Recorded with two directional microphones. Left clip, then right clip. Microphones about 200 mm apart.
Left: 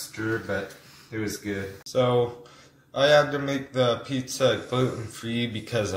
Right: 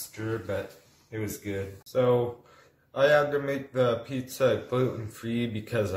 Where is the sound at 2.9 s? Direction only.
20° right (ahead or behind).